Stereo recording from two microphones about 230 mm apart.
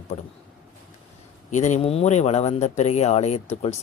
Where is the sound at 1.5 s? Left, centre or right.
Left.